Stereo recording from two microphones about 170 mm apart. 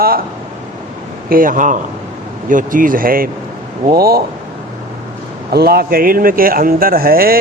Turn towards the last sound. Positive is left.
turn(degrees=-60)  # may be behind; listen again after turning